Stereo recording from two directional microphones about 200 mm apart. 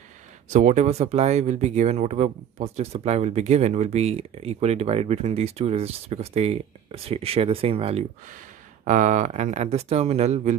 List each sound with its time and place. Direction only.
0.5 s speech: 35° right (ahead or behind)